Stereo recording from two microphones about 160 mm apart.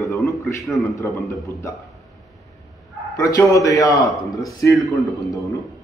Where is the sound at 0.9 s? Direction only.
20° left (ahead or behind).